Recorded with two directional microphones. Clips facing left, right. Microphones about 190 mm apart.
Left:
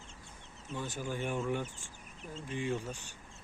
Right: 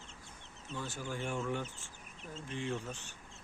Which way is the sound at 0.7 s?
15° left (ahead or behind).